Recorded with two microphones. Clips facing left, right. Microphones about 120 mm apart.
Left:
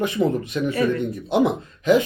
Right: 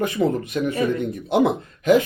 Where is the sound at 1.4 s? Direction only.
45° right (ahead or behind).